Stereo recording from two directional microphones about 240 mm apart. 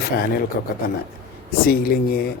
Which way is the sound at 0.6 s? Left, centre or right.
Left.